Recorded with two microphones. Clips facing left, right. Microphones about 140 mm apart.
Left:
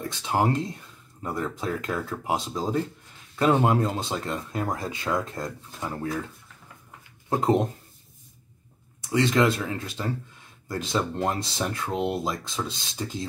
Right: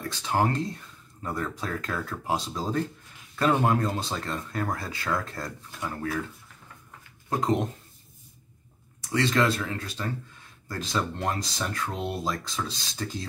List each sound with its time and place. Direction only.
0.2 s speech: 15° left (ahead or behind)
7.2 s speech: 25° left (ahead or behind)
9.1 s speech: 15° left (ahead or behind)